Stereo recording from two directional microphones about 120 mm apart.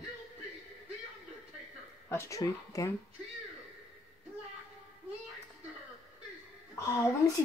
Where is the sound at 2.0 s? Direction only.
25° left (ahead or behind).